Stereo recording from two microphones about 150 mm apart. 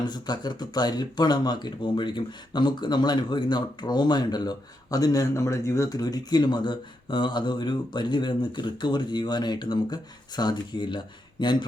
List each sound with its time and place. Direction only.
0.0 s speech: 30° left (ahead or behind)